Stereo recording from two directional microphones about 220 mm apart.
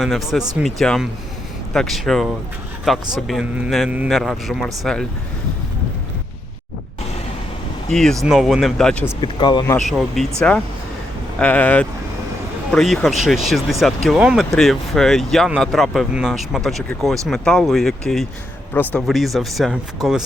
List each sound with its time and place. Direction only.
0.0 s speech: centre (ahead or behind)
7.9 s speech: centre (ahead or behind)
9.2 s speech: 20° left (ahead or behind)
9.7 s speech: centre (ahead or behind)